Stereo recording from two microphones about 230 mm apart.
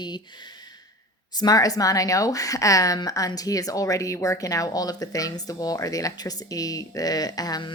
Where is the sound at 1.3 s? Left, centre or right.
Centre.